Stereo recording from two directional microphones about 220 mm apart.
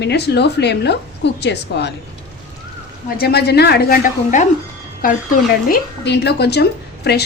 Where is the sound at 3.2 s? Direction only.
45° left (ahead or behind).